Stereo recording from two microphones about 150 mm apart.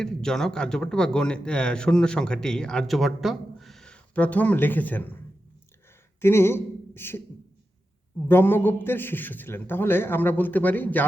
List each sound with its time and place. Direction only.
0.0 s a man's voice: 5° left (ahead or behind)
6.2 s speech: 15° left (ahead or behind)
8.3 s a man's voice: 15° left (ahead or behind)